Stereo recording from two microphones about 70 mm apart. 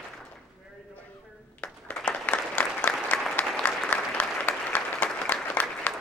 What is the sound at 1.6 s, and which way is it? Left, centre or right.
Applause, left.